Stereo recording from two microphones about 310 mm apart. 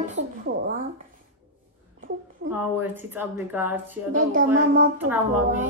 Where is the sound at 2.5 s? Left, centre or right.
Centre.